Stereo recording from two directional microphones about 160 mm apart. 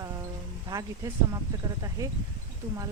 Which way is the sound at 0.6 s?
20° right (ahead or behind).